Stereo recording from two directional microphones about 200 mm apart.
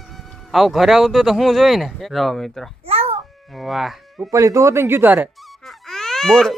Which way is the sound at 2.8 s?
30° right (ahead or behind).